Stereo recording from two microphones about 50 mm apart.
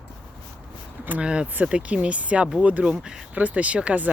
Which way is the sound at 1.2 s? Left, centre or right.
Centre.